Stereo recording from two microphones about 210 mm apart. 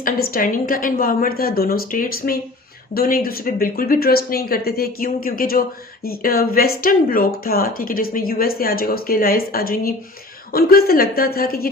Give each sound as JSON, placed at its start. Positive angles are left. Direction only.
{"t": 0.0, "sound": "a woman's voice", "side_deg": 40}